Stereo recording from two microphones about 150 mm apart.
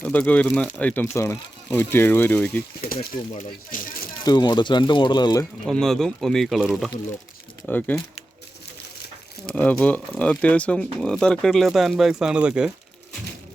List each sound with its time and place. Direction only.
0.0 s speech: 10° left (ahead or behind)
2.8 s speech: 90° left
3.3 s a sound: 65° left (ahead or behind)
4.3 s speech: 30° left (ahead or behind)
5.6 s speech: 5° left (ahead or behind)
7.7 s speech: 10° left (ahead or behind)
9.6 s speech: 10° left (ahead or behind); by 12.7 s 5° right (ahead or behind)